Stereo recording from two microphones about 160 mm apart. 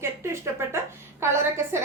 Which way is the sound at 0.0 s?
15° right (ahead or behind).